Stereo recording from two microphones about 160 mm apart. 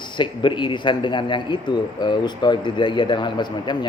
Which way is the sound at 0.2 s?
30° left (ahead or behind).